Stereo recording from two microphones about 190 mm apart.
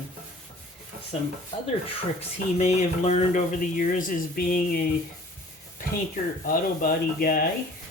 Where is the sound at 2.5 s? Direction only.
35° left (ahead or behind).